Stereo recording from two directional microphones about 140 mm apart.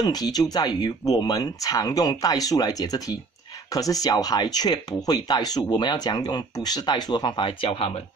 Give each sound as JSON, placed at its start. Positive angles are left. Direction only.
{"t": 0.0, "sound": "speech", "side_deg": 30}